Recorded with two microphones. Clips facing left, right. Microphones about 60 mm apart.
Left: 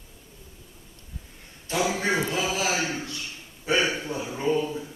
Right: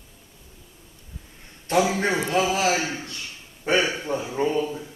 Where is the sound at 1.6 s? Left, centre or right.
Right.